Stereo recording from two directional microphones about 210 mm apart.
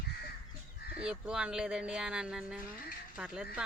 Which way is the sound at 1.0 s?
5° right (ahead or behind).